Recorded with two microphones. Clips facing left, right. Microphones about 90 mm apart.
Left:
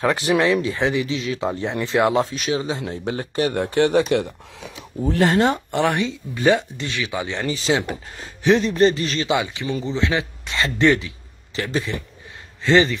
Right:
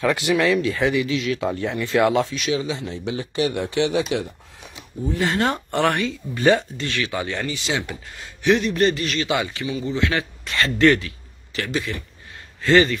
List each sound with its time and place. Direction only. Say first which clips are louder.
0.0 s speech: left 1 dB; 35° left (ahead or behind)
2.3 s speech: even; 40° left (ahead or behind); by 5.3 s 80° left
5.4 s speech: left 2 dB; 15° left (ahead or behind)
7.4 s speech: left 5 dB; 35° left (ahead or behind)
9.3 s a man's voice: left 2 dB; 15° left (ahead or behind)